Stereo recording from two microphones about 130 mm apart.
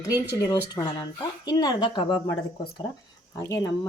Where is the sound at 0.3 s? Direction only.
30° left (ahead or behind).